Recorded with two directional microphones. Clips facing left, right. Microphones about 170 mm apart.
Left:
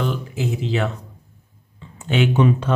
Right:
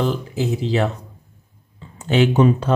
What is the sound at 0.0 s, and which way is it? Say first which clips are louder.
Speech: right 3 dB; 35° right (ahead or behind).